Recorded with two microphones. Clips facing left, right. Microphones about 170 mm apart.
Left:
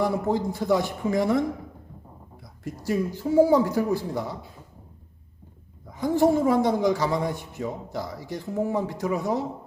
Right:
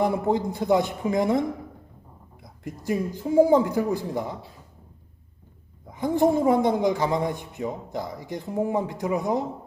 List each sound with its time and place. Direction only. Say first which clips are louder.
0.0 s a man's voice: right 1 dB; 20° right (ahead or behind)
2.6 s speech: left 1 dB; 20° right (ahead or behind)
5.9 s a man's voice: even; 20° right (ahead or behind)